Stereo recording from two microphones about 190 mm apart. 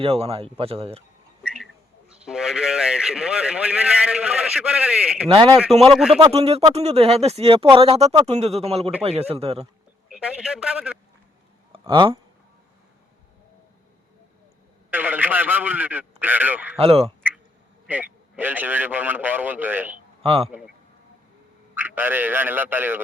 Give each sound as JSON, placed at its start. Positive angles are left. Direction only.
{"t": 0.0, "sound": "speech", "side_deg": -30}
{"t": 2.0, "sound": "a man's voice", "side_deg": -5}
{"t": 5.3, "sound": "a man's voice", "side_deg": -25}
{"t": 5.8, "sound": "a man's voice", "side_deg": 0}
{"t": 6.1, "sound": "speech", "side_deg": -30}
{"t": 10.1, "sound": "a man's voice", "side_deg": -5}
{"t": 11.7, "sound": "speech", "side_deg": -25}
{"t": 14.8, "sound": "a man's voice", "side_deg": -10}
{"t": 16.7, "sound": "speech", "side_deg": -30}
{"t": 17.8, "sound": "a man's voice", "side_deg": -10}
{"t": 20.2, "sound": "speech", "side_deg": -30}
{"t": 21.8, "sound": "a man's voice", "side_deg": -10}